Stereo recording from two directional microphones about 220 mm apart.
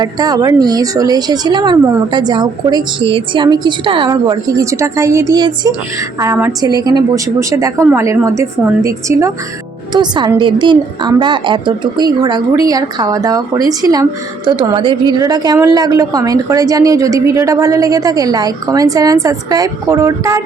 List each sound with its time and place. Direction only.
0.0 s a woman's voice: 15° right (ahead or behind)